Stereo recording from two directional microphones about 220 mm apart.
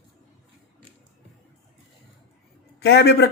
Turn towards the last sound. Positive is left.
turn(degrees=50)  # may be behind; listen again after turning